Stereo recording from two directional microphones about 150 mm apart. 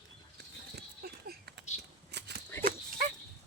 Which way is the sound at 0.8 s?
90° right.